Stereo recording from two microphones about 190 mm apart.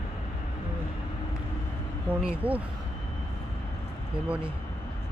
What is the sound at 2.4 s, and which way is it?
Speech, 30° right (ahead or behind).